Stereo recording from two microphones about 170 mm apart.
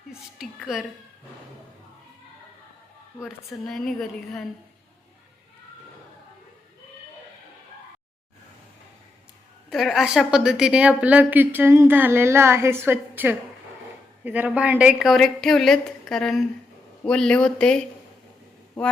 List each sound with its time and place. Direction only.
0.3 s a woman's voice: centre (ahead or behind)
3.7 s a woman's voice: centre (ahead or behind)
9.6 s a woman's voice: centre (ahead or behind)
18.8 s a sound: 5° left (ahead or behind)